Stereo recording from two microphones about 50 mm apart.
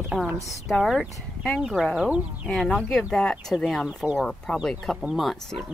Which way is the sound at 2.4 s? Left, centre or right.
Centre.